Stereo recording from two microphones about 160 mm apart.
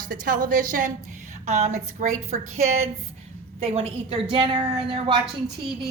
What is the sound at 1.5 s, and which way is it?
A woman's voice, 45° right (ahead or behind).